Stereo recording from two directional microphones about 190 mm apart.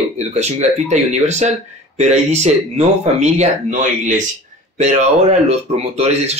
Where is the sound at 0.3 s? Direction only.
35° right (ahead or behind).